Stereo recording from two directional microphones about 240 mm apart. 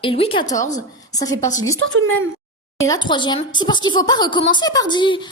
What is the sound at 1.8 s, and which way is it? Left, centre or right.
Speech, right.